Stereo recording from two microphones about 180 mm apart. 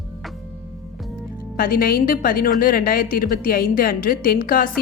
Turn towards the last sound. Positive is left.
turn(degrees=50)  # may be behind; listen again after turning